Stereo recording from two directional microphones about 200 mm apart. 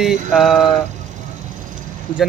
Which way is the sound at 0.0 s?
Centre (ahead or behind).